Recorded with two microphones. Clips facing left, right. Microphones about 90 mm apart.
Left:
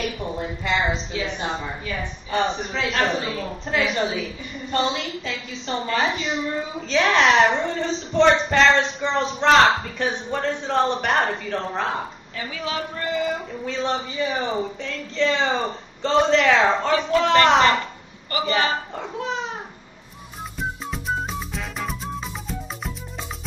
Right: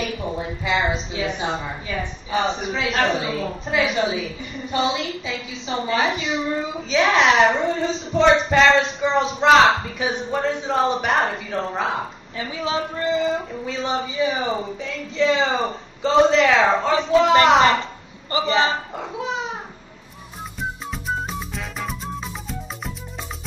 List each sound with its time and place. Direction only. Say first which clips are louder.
0.0 s a woman's voice: right 1 dB; 5° right (ahead or behind)
2.3 s speech: right 1 dB; 5° right (ahead or behind)
12.4 s speech: right 4 dB; 25° right (ahead or behind)
13.7 s a man's voice: left 1 dB; 5° right (ahead or behind)
18.5 s speech: right 2 dB; 25° right (ahead or behind)
18.9 s speech: right 1 dB; 5° right (ahead or behind)
21.1 s music: even; centre (ahead or behind)